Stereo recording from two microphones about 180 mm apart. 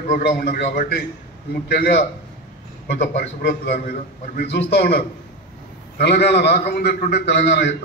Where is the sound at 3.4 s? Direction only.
65° left (ahead or behind).